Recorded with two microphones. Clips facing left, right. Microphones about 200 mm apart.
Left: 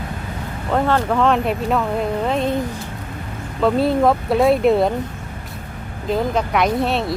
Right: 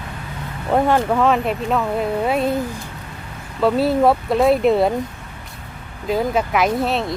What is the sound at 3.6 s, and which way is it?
Speech, 5° right (ahead or behind).